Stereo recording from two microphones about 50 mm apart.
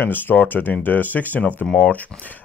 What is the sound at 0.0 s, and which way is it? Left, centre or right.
Speech, left.